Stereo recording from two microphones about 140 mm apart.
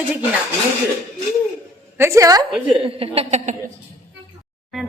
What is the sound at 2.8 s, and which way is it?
Speech, 40° right (ahead or behind).